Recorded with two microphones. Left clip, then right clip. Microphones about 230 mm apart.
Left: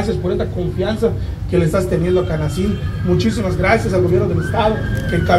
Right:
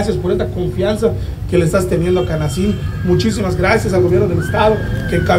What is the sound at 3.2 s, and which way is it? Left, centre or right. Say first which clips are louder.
Speech: right 2 dB; right.